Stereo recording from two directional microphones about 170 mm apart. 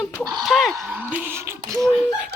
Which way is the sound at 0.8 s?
10° right (ahead or behind).